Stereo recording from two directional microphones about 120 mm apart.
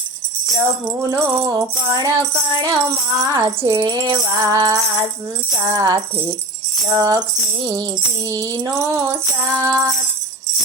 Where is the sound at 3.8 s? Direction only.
35° right (ahead or behind).